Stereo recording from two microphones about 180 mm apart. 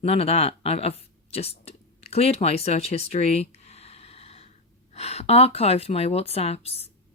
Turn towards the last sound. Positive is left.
turn(degrees=35)  # may be behind; listen again after turning